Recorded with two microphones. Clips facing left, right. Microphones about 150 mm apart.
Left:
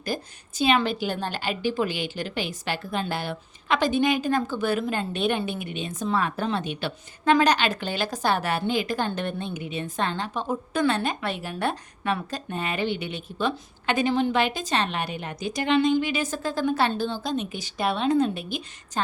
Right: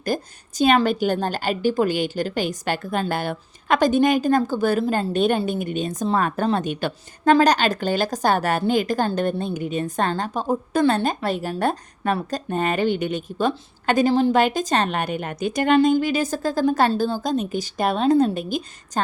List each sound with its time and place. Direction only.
0.0 s a woman's voice: 45° right (ahead or behind)